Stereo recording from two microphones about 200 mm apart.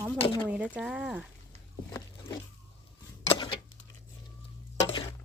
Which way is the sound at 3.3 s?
20° left (ahead or behind).